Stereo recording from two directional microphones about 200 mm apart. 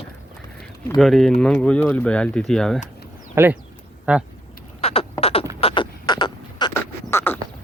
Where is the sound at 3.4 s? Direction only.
15° right (ahead or behind).